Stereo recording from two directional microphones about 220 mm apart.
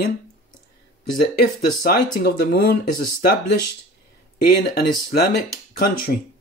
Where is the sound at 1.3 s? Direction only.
45° left (ahead or behind).